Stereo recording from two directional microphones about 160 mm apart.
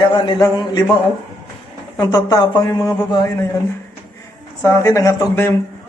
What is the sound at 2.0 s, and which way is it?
Speech, 20° left (ahead or behind).